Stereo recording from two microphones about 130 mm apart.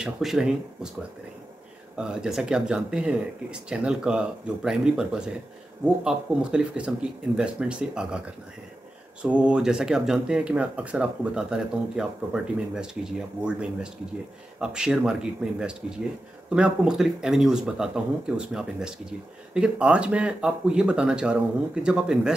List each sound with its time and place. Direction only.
0.0 s speech: 5° right (ahead or behind)
2.0 s speech: 5° right (ahead or behind)
9.2 s speech: 10° right (ahead or behind)